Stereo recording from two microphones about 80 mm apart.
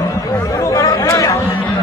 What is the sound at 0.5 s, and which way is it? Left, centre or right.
Chatter, left.